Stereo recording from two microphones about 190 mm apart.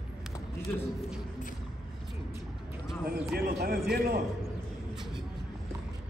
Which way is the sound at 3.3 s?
55° right (ahead or behind).